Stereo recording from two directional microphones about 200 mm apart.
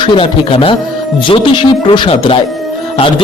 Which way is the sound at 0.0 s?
25° left (ahead or behind).